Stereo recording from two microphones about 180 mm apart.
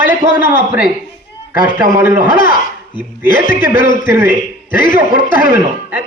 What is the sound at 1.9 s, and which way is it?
Speech, 15° right (ahead or behind).